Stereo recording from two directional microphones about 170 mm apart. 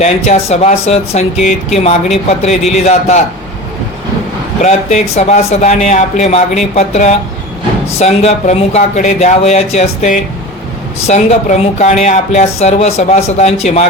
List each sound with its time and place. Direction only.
0.0 s speech: 40° left (ahead or behind)
4.6 s speech: 40° left (ahead or behind)